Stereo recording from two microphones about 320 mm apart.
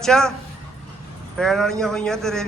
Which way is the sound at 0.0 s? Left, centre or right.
Centre.